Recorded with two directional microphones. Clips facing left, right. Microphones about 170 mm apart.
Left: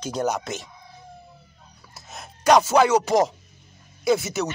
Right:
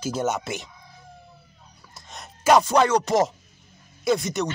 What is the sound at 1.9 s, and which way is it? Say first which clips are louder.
Speech: left 1 dB; 5° left (ahead or behind).